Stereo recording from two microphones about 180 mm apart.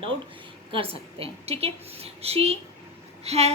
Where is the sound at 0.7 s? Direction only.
30° right (ahead or behind).